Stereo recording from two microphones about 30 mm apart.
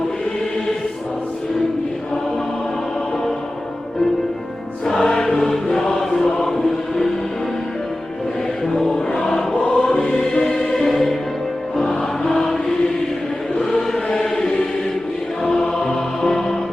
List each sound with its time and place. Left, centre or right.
5.0 s choir: left
8.6 s a sound: centre
9.6 s choir: centre
10.8 s music: centre
11.8 s choir: centre
13.6 s chant: centre
14.2 s choir: centre
15.4 s music: centre